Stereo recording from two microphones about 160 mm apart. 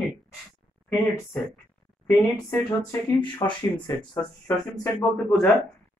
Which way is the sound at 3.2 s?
30° left (ahead or behind).